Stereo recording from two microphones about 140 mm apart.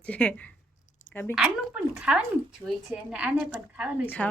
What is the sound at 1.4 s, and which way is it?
Speech, 5° right (ahead or behind).